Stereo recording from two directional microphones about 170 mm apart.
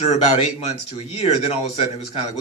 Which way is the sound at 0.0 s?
40° left (ahead or behind).